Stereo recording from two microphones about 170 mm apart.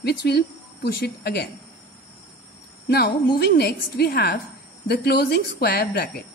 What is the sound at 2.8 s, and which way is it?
A woman's voice, 70° left (ahead or behind).